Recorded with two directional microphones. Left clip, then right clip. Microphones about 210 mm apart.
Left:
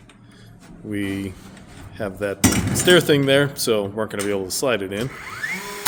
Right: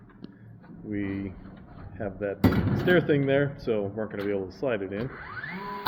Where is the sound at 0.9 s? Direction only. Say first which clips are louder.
Left 6 dB; 40° left (ahead or behind).